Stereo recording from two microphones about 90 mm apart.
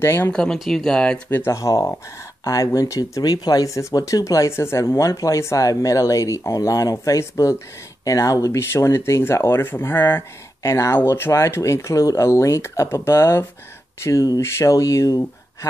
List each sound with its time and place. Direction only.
0.0 s speech: 25° left (ahead or behind)
0.3 s speech: 10° left (ahead or behind)
1.3 s speech: 30° left (ahead or behind)